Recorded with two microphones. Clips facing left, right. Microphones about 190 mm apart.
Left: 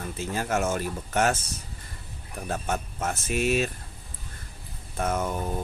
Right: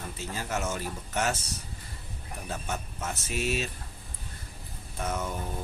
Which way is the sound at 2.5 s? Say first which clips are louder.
Left 6 dB; 50° left (ahead or behind).